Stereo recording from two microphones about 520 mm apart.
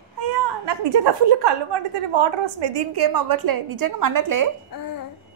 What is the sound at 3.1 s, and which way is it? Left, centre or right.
A woman's voice, right.